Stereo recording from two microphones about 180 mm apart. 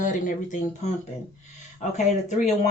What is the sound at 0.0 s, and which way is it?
Speech, 45° left (ahead or behind).